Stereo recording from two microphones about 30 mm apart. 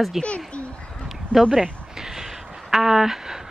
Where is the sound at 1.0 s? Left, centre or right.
Centre.